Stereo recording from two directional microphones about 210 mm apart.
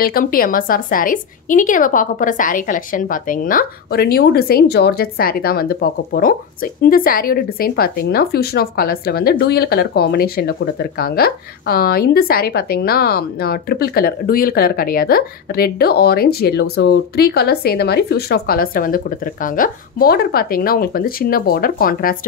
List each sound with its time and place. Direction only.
0.0 s a woman's voice: 45° left (ahead or behind)